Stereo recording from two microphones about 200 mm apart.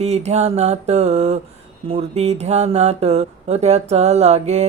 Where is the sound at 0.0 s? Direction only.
35° right (ahead or behind).